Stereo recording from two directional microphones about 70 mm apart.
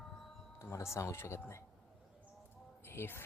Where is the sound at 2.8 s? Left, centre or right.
Left.